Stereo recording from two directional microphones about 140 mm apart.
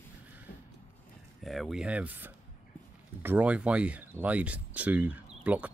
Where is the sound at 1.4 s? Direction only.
Centre (ahead or behind).